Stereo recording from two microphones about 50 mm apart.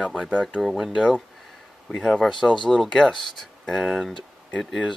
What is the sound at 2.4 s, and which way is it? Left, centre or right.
Speech, centre.